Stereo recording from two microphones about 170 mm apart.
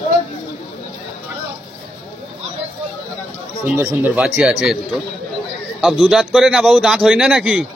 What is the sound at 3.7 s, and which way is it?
A man's voice, 10° right (ahead or behind).